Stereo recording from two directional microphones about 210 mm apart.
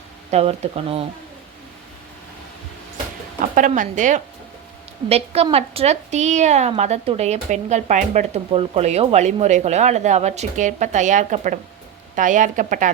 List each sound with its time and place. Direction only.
0.3 s speech: 30° right (ahead or behind)
3.5 s a woman's voice: 40° right (ahead or behind)